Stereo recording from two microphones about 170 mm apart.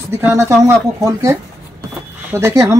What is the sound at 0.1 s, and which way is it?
Speech, 15° right (ahead or behind).